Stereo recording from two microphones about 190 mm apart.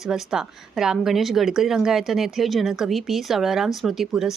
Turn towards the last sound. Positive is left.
turn(degrees=0)  # may be behind; listen again after turning